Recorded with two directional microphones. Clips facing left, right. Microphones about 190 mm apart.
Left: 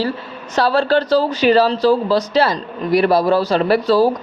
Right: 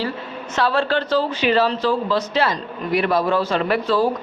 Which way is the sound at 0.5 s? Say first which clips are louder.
Left 5 dB; 35° left (ahead or behind).